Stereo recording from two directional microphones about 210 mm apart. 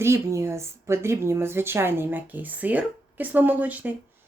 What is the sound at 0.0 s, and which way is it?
A woman's voice, 15° right (ahead or behind).